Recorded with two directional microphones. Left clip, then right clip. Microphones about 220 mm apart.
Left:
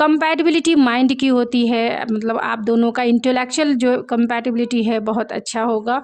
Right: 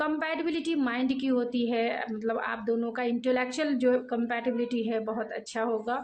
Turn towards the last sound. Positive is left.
turn(degrees=45)  # may be behind; listen again after turning